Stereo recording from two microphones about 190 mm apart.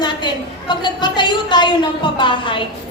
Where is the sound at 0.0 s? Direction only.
25° left (ahead or behind).